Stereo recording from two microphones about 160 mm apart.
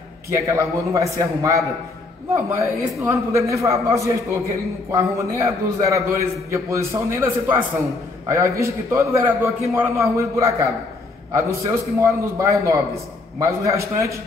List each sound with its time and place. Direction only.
0.3 s a man's voice: 20° right (ahead or behind)
8.9 s a man's voice: 15° right (ahead or behind)